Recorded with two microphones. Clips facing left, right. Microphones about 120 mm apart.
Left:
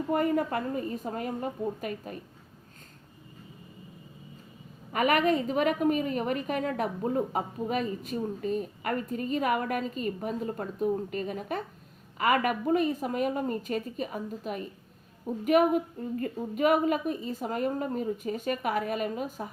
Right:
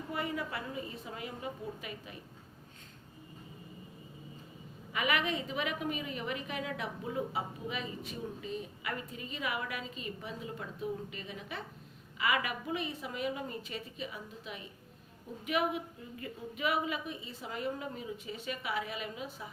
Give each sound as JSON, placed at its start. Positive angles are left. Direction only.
{"t": 0.1, "sound": "a woman's voice", "side_deg": 45}
{"t": 4.9, "sound": "a woman's voice", "side_deg": 45}